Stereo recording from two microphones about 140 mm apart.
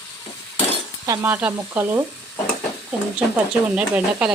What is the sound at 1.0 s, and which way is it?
Speech, 20° right (ahead or behind).